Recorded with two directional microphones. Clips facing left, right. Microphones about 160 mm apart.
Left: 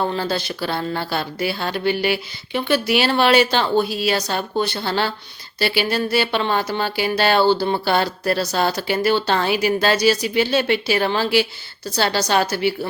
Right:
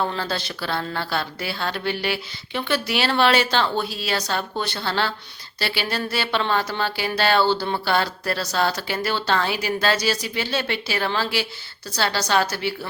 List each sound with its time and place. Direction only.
0.1 s speech: 5° left (ahead or behind)